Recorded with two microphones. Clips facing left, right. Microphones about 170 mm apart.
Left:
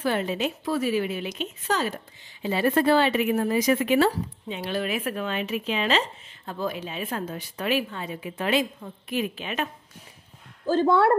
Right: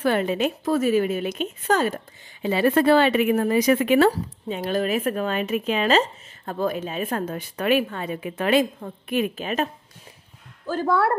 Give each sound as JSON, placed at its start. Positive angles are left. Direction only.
{"t": 0.0, "sound": "a woman's voice", "side_deg": -60}
{"t": 2.4, "sound": "speech", "side_deg": -75}
{"t": 9.4, "sound": "a woman's voice", "side_deg": -40}
{"t": 10.7, "sound": "speech", "side_deg": 25}